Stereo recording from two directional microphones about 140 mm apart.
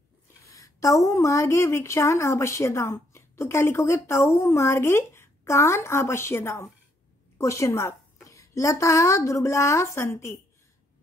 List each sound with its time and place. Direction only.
0.5 s a woman's voice: 25° left (ahead or behind)